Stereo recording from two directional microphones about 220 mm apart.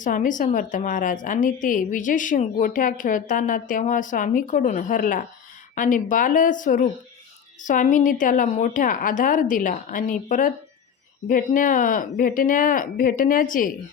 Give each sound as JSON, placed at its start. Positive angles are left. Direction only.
{"t": 0.0, "sound": "a woman's voice", "side_deg": 35}